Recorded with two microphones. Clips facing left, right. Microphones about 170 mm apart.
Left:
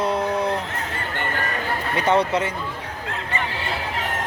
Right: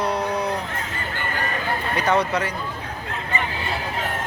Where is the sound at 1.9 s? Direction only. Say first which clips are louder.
Left 2 dB; 25° left (ahead or behind).